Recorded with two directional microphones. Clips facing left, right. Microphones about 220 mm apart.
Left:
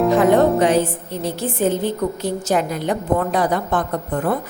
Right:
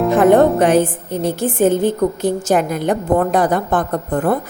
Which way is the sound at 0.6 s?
50° right (ahead or behind).